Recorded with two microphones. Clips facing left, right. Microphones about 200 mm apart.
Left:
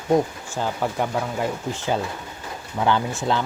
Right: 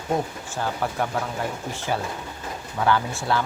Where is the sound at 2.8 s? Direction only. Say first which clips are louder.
Left 1 dB; 20° left (ahead or behind).